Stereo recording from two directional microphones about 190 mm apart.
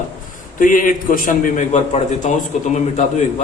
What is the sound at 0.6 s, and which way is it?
A man's voice, 45° left (ahead or behind).